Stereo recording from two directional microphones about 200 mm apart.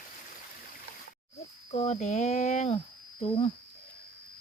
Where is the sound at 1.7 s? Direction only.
35° left (ahead or behind).